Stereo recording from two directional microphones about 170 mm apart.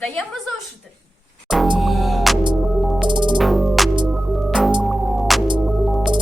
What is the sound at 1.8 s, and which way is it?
Music, centre (ahead or behind).